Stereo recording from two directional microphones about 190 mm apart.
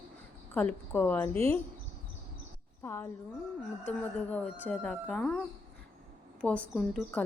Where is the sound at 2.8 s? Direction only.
10° left (ahead or behind).